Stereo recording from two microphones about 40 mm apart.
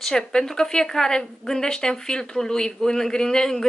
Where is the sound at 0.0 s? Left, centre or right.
Centre.